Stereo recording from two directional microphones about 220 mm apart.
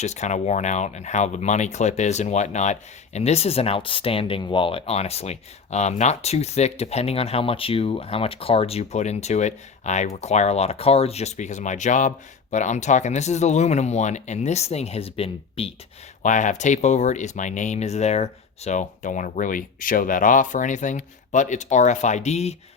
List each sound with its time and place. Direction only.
0.0 s speech: 30° left (ahead or behind)